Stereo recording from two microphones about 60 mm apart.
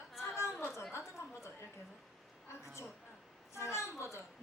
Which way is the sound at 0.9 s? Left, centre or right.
Left.